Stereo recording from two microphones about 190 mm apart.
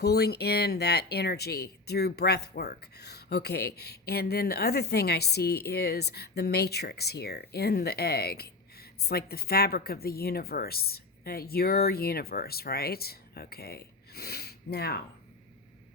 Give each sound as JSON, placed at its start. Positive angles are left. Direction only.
{"t": 0.0, "sound": "a woman's voice", "side_deg": 60}